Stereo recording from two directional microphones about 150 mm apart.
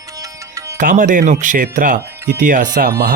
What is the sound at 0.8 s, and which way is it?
Speech, 60° right (ahead or behind).